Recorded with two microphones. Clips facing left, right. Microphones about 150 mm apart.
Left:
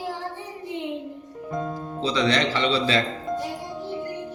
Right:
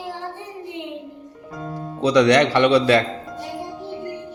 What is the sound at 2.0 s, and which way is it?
A man's voice, 70° right (ahead or behind).